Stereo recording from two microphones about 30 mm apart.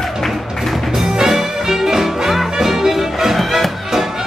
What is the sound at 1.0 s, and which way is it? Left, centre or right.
Music, centre.